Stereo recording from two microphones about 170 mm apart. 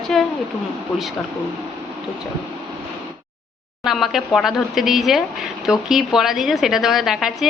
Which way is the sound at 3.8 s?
Centre (ahead or behind).